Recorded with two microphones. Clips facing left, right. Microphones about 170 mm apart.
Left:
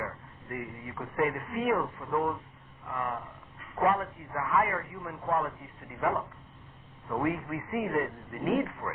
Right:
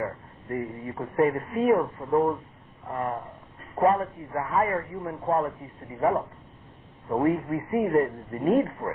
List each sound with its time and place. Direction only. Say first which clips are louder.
0.5 s a man's voice: right 7 dB; 35° right (ahead or behind)